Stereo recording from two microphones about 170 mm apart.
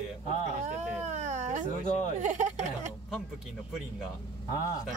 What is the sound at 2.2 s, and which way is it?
Speech, 45° right (ahead or behind).